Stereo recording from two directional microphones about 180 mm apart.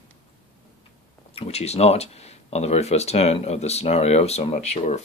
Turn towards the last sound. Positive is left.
turn(degrees=40)  # may be behind; listen again after turning